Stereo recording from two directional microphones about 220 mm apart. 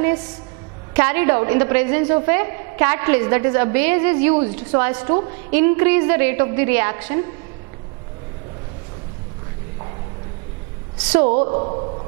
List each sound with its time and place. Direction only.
0.9 s a woman's voice: 10° right (ahead or behind)
11.2 s a woman's voice: 30° right (ahead or behind)